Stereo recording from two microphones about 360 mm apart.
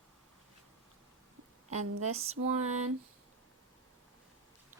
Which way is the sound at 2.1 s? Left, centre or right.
Centre.